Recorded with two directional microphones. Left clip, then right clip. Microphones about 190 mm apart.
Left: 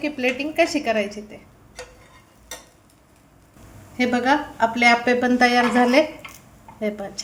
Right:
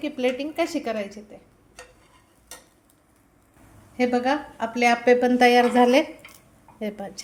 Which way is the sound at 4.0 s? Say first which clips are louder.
Left 3 dB; 10° right (ahead or behind).